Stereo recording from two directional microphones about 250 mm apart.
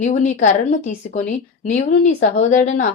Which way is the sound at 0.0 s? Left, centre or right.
Left.